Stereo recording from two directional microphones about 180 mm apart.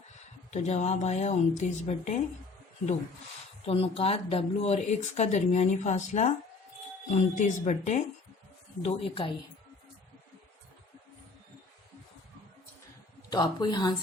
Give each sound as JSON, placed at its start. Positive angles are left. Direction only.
{"t": 0.5, "sound": "speech", "side_deg": 40}
{"t": 3.7, "sound": "speech", "side_deg": 35}
{"t": 8.8, "sound": "speech", "side_deg": 30}
{"t": 13.3, "sound": "speech", "side_deg": 25}